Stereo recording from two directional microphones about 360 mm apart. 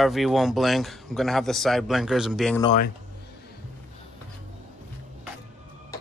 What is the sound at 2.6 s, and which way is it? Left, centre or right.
Speech, centre.